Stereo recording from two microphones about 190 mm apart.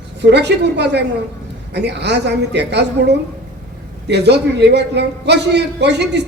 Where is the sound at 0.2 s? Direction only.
65° right (ahead or behind).